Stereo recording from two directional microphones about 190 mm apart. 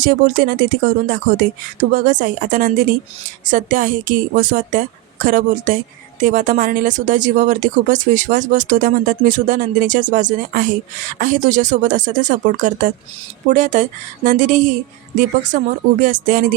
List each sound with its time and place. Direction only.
0.0 s speech: 45° right (ahead or behind)